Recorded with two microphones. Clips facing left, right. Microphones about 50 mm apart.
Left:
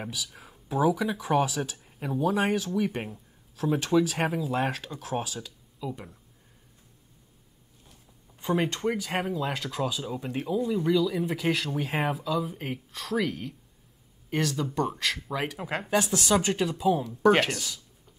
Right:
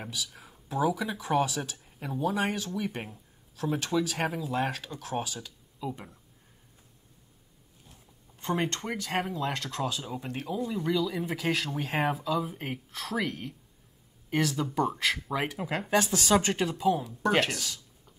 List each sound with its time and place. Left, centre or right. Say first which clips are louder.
0.0 s speech: left 2 dB; centre
5.8 s speech: left 1 dB; centre
8.4 s speech: left 3 dB; centre
15.6 s speech: even; centre
17.2 s speech: left 6 dB; centre
17.5 s speech: left 2 dB; centre